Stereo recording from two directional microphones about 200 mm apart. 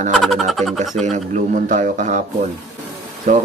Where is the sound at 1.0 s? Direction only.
35° right (ahead or behind).